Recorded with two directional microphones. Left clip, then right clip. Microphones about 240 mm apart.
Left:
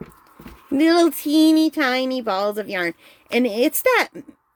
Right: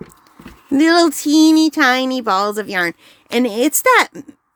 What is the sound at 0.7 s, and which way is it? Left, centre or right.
Speech, right.